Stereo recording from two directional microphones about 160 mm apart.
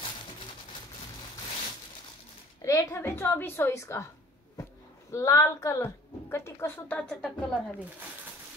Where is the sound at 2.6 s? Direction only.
20° left (ahead or behind).